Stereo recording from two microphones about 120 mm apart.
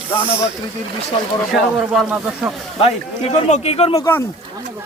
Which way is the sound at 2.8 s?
65° left (ahead or behind).